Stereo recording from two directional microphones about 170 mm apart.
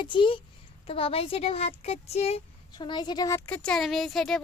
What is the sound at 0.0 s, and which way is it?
A child's voice, 30° left (ahead or behind).